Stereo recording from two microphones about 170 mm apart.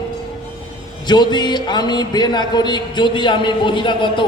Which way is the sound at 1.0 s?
25° left (ahead or behind).